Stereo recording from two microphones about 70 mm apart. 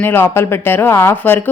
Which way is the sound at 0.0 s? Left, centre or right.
Left.